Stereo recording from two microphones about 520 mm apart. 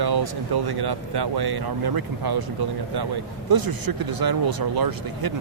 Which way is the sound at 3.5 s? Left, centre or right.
Right.